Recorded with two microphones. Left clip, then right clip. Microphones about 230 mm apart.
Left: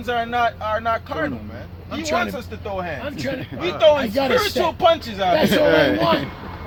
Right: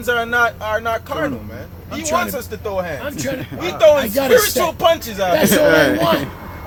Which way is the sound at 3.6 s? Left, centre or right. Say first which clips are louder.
Right 3 dB; right.